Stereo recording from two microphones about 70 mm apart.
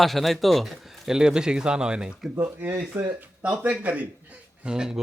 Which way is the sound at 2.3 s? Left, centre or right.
Right.